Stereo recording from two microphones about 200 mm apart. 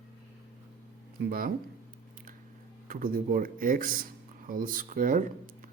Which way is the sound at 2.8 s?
45° right (ahead or behind).